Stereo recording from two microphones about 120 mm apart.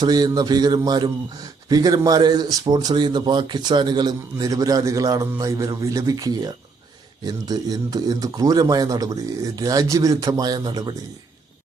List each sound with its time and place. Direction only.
0.0 s speech: 35° right (ahead or behind)